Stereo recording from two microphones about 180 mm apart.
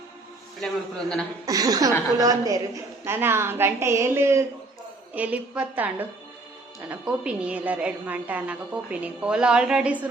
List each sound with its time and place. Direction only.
0.6 s a man's voice: centre (ahead or behind)
1.5 s a woman's voice: 20° right (ahead or behind)